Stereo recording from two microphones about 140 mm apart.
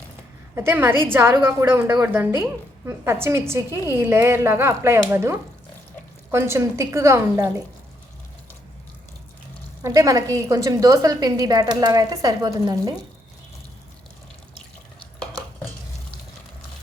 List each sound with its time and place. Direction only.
0.5 s a woman's voice: 15° right (ahead or behind)
9.8 s a woman's voice: 25° right (ahead or behind)